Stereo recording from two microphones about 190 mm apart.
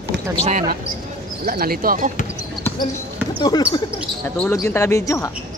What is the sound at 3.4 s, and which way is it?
Speech, 20° left (ahead or behind).